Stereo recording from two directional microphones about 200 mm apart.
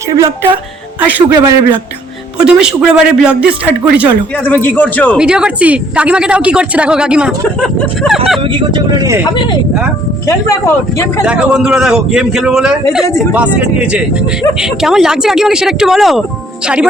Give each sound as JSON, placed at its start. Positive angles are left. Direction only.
{"t": 0.1, "sound": "a man's voice", "side_deg": -15}
{"t": 4.4, "sound": "speech", "side_deg": 10}
{"t": 5.1, "sound": "a woman's voice", "side_deg": -5}
{"t": 8.4, "sound": "speech", "side_deg": -25}
{"t": 11.3, "sound": "a woman's voice", "side_deg": -5}